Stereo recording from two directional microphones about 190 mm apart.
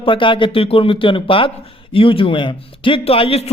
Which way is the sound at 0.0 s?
25° left (ahead or behind).